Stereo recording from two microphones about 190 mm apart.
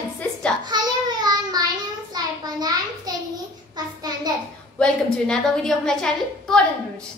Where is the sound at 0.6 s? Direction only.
20° right (ahead or behind).